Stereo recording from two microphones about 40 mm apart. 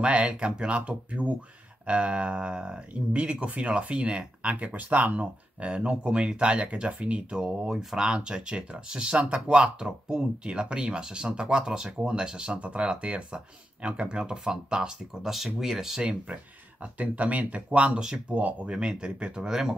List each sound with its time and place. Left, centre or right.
0.0 s speech: right
4.7 s speech: right
5.7 s speech: right
15.2 s speech: centre
16.8 s speech: right
17.6 s speech: right